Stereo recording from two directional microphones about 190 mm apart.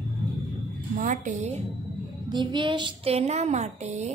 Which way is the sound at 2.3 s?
25° right (ahead or behind).